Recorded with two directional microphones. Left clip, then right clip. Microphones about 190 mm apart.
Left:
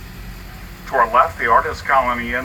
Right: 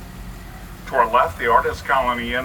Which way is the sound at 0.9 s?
25° right (ahead or behind).